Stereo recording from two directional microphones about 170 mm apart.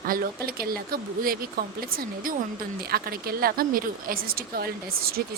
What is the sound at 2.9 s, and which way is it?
Speech, 60° right (ahead or behind).